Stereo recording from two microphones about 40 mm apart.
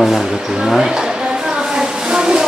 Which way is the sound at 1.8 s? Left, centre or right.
Centre.